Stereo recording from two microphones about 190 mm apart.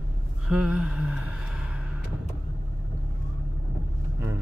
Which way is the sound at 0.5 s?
5° right (ahead or behind).